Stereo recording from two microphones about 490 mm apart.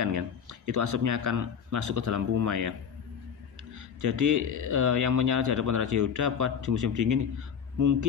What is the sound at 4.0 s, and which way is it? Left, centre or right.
Speech, right.